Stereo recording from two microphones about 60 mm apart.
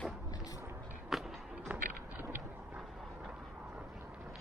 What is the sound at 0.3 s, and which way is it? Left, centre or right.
Vehicle, left.